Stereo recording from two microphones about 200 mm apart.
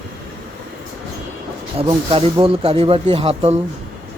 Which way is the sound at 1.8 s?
25° right (ahead or behind).